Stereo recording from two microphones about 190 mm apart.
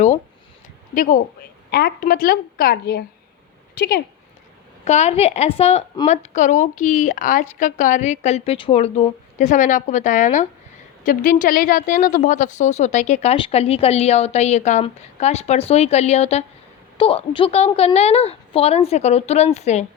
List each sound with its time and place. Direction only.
0.9 s a woman's voice: 45° left (ahead or behind)
4.9 s speech: 35° left (ahead or behind)